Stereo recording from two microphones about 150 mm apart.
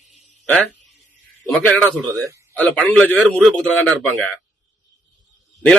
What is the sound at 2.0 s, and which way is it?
Speech, 20° right (ahead or behind).